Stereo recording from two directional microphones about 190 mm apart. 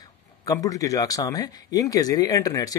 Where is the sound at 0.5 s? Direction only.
15° left (ahead or behind).